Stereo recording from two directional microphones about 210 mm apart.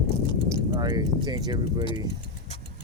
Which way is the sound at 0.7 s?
20° right (ahead or behind).